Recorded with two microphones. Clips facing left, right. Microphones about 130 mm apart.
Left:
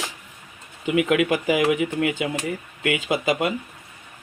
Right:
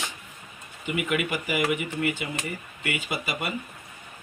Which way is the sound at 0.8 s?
90° left.